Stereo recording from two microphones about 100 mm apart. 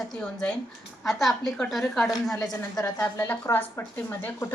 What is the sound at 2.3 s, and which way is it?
Speech, 35° left (ahead or behind).